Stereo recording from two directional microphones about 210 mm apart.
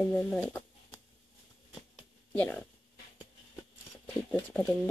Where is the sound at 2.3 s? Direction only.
10° left (ahead or behind).